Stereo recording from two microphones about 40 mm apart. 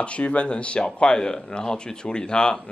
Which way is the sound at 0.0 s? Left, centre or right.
Left.